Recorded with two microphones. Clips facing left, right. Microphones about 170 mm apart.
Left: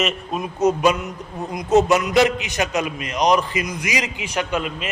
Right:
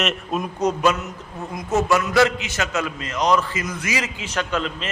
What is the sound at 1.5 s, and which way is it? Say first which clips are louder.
A man's voice: left 4 dB; 20° left (ahead or behind).